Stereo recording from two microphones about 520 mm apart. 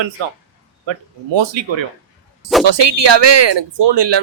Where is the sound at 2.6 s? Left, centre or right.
Right.